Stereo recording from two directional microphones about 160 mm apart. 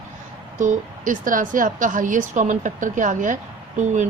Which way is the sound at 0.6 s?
55° right (ahead or behind).